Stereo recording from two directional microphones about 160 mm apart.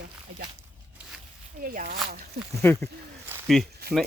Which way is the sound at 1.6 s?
60° right (ahead or behind).